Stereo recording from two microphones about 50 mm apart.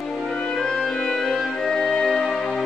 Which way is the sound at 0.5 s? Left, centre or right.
Centre.